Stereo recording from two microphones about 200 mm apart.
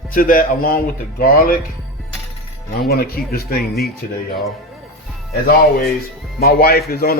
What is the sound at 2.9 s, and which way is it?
Speech, 50° left (ahead or behind).